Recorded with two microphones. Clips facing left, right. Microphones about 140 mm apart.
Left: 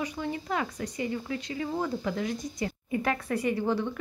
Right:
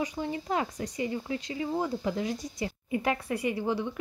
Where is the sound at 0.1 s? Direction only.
25° right (ahead or behind).